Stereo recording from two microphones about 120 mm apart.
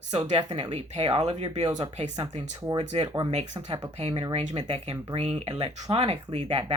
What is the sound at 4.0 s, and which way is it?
Speech, 60° right (ahead or behind).